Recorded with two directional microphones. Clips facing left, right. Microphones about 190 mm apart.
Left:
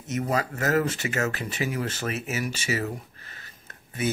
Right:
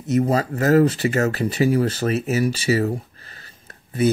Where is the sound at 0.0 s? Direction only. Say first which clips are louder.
Right 8 dB; 35° right (ahead or behind).